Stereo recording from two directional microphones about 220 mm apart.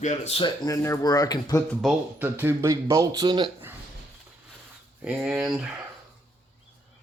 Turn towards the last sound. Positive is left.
turn(degrees=-5)  # may be behind; listen again after turning